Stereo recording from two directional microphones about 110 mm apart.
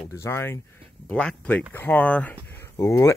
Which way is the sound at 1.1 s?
10° left (ahead or behind).